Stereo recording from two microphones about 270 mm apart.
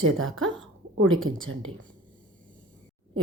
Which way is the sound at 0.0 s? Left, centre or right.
Right.